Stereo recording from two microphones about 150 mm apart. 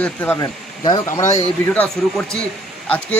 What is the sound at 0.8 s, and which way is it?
Speech, 25° left (ahead or behind).